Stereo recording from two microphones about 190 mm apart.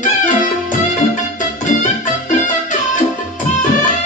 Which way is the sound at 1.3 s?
45° left (ahead or behind).